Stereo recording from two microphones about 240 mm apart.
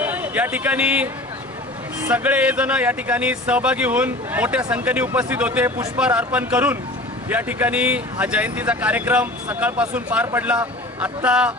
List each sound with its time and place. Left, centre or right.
0.0 s a man's voice: centre